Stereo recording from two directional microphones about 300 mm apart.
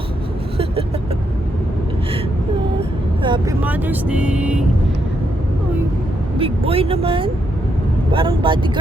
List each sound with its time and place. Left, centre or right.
0.5 s vehicle: centre
3.2 s speech: centre
6.4 s speech: centre